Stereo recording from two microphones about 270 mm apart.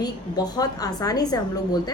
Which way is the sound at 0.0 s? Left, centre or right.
Centre.